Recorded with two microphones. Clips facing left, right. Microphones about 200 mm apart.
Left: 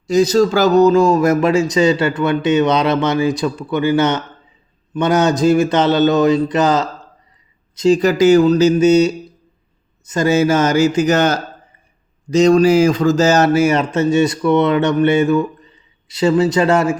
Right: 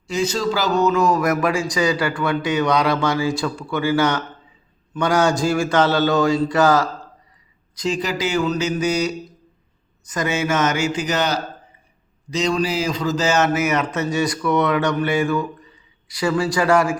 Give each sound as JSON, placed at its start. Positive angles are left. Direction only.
{"t": 0.1, "sound": "speech", "side_deg": 40}
{"t": 7.9, "sound": "speech", "side_deg": 45}